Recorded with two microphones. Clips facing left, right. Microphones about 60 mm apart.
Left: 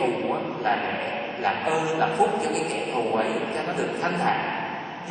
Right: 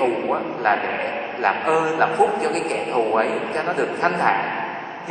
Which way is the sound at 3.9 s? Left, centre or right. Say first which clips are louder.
Right 6 dB; right.